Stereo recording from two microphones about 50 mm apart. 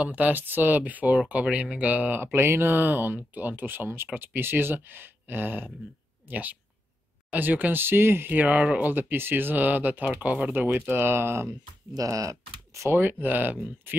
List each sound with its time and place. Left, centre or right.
0.0 s speech: right
2.3 s speech: right
8.4 s speech: right
12.1 s speech: right
12.9 s speech: right